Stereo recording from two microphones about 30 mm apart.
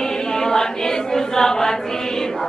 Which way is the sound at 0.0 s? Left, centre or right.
Left.